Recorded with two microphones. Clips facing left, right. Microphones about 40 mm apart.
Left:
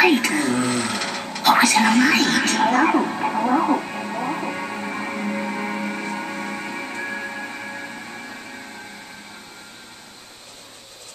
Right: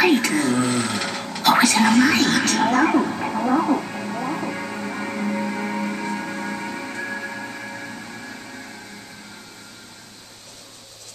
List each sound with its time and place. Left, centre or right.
0.0 s television: centre